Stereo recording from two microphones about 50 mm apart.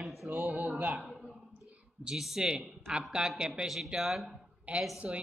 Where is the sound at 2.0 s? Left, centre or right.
Centre.